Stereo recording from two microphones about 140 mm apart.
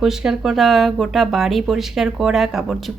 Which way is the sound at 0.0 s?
5° right (ahead or behind).